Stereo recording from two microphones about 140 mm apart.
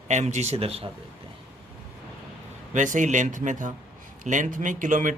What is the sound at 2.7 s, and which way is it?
Speech, 65° right (ahead or behind).